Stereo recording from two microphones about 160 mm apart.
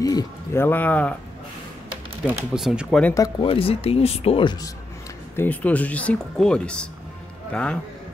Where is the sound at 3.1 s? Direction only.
20° left (ahead or behind).